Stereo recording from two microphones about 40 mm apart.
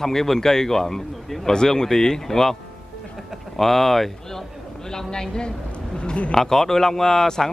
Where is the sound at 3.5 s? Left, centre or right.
Centre.